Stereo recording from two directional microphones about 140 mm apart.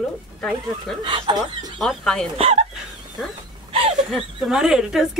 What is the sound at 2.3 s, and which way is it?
Speech, 45° right (ahead or behind).